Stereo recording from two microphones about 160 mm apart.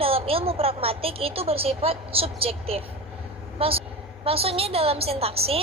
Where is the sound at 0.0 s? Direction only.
35° right (ahead or behind).